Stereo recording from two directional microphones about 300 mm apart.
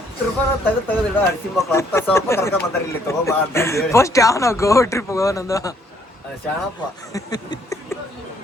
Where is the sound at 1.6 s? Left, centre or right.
Centre.